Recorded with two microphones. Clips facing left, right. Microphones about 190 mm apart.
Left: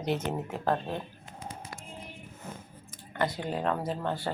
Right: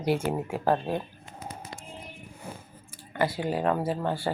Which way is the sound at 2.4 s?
10° right (ahead or behind).